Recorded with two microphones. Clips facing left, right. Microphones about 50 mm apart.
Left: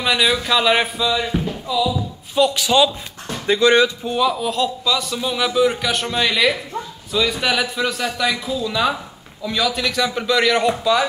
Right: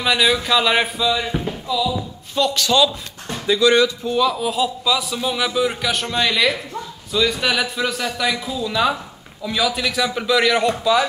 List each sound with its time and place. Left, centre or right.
0.0 s speech: centre
3.4 s speech: left
4.1 s a man's voice: centre
4.4 s a man's voice: centre